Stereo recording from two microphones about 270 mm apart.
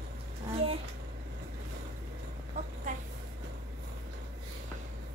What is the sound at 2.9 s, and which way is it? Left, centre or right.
Vehicle, right.